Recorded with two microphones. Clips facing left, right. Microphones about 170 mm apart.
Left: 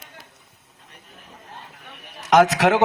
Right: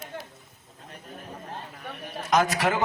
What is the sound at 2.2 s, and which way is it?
Speech, 80° left.